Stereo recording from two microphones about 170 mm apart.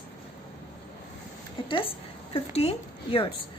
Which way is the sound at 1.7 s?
30° left (ahead or behind).